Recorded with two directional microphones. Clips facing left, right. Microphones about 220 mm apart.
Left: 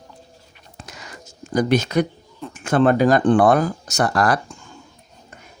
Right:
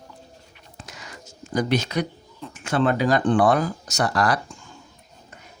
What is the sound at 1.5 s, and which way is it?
Speech, 45° left (ahead or behind).